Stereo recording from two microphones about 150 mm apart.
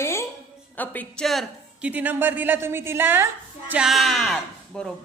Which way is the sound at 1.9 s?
10° right (ahead or behind).